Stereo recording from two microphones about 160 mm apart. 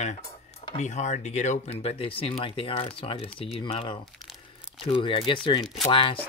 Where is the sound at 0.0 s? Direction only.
45° left (ahead or behind).